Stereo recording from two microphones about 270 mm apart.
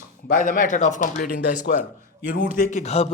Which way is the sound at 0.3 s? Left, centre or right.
Left.